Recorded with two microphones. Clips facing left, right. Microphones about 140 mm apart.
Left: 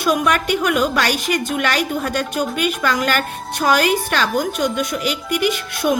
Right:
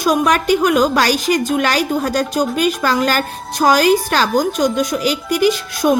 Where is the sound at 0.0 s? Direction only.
40° right (ahead or behind).